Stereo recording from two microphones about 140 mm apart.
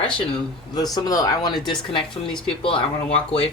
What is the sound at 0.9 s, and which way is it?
Speech, 25° left (ahead or behind).